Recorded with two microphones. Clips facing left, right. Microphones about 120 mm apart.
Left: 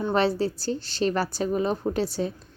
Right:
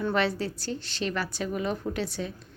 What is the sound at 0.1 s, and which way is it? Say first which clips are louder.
Speech: left 4 dB; 30° left (ahead or behind).